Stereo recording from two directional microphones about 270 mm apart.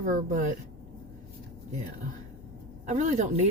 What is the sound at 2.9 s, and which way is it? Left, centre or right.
Speech, right.